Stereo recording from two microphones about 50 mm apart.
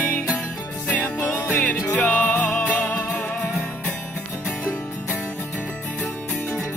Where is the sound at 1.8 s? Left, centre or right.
Left.